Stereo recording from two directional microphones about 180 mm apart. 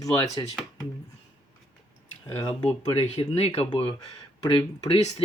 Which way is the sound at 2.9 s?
35° left (ahead or behind).